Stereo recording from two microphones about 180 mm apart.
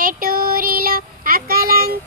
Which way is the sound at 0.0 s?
55° right (ahead or behind).